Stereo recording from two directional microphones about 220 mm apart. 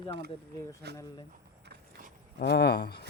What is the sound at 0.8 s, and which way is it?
Speech, 45° right (ahead or behind).